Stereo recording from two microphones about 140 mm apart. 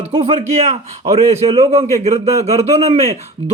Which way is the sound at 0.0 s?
45° right (ahead or behind).